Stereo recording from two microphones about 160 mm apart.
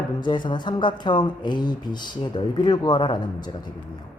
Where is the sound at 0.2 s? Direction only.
30° left (ahead or behind).